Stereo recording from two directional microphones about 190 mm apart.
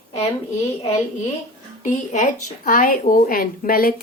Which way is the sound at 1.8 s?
40° left (ahead or behind).